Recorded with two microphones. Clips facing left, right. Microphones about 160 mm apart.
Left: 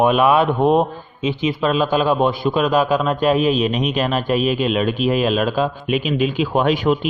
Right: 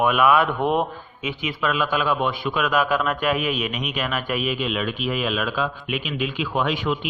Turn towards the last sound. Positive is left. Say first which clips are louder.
# left 7 dB
turn(degrees=45)  # may be behind; listen again after turning